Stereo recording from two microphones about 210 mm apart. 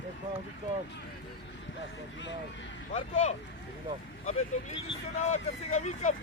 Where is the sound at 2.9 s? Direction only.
35° left (ahead or behind).